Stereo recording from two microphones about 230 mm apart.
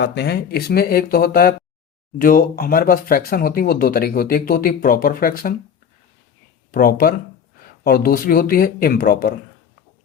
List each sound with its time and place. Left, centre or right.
0.0 s speech: left
6.7 s speech: left